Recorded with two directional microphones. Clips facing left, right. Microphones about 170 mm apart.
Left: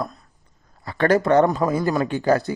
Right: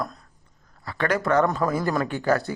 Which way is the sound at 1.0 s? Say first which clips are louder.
Left 7 dB; 35° left (ahead or behind).